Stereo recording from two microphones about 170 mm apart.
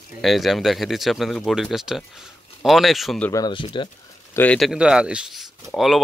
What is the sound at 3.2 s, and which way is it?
Speech, 20° left (ahead or behind).